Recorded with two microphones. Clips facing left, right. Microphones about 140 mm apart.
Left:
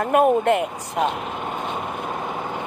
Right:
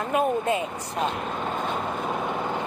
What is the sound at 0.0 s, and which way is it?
Speech, 60° left (ahead or behind).